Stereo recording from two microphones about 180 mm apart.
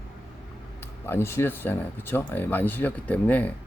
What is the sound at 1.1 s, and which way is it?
A man's voice, 15° left (ahead or behind).